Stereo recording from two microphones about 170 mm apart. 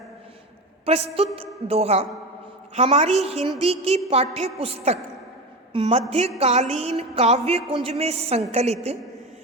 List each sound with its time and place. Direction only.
0.9 s a woman's voice: 35° right (ahead or behind)